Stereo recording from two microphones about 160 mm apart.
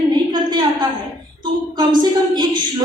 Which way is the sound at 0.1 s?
25° right (ahead or behind).